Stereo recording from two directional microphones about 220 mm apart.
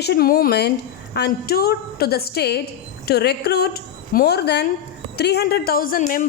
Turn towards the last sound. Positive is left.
turn(degrees=35)  # may be behind; listen again after turning